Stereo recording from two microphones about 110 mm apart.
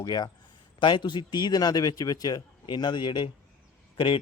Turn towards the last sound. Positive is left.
turn(degrees=50)  # may be behind; listen again after turning